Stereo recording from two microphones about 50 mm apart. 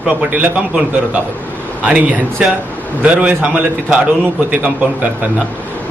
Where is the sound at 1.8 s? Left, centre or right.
Right.